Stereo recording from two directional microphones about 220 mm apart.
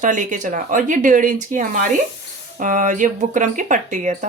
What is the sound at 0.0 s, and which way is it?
A woman's voice, 35° right (ahead or behind).